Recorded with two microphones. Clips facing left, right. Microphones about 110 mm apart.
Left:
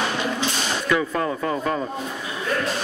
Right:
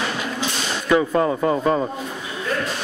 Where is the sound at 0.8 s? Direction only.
25° right (ahead or behind).